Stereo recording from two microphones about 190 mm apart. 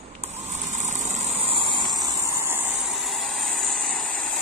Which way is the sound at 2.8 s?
Centre (ahead or behind).